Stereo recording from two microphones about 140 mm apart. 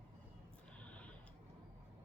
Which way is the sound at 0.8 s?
10° left (ahead or behind).